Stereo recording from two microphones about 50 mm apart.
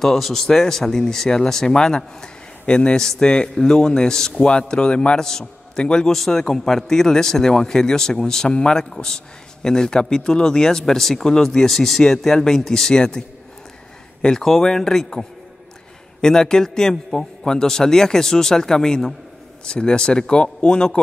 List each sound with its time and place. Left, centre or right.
0.0 s speech: centre
14.2 s speech: centre